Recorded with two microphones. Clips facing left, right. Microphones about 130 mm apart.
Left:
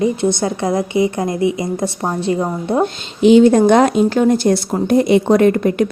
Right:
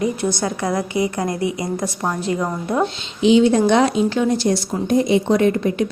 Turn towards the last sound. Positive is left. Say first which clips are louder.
# left 4 dB
turn(degrees=55)  # may be behind; listen again after turning